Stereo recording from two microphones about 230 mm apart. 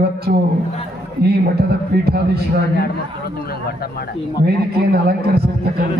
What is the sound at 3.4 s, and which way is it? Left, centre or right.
Speech, left.